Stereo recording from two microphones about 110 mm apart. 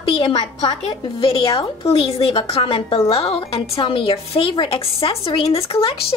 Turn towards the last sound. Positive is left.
turn(degrees=60)  # may be behind; listen again after turning